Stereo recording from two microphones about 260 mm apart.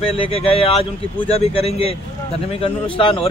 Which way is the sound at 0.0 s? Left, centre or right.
Left.